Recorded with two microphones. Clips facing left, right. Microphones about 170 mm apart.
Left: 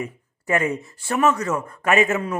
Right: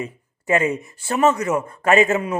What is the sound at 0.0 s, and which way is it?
Speech, 25° right (ahead or behind).